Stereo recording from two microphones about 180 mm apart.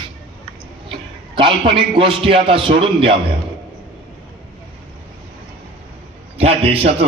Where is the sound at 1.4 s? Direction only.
30° right (ahead or behind).